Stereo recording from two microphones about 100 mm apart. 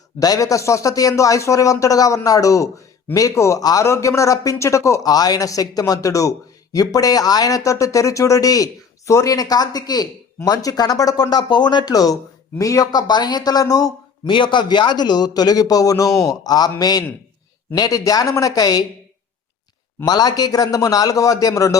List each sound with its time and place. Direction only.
0.2 s speech: 35° left (ahead or behind)
14.3 s speech: 55° left (ahead or behind)
20.1 s speech: 40° left (ahead or behind)